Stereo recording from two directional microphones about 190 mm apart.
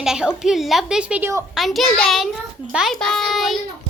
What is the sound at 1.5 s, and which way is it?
A child's voice, centre (ahead or behind).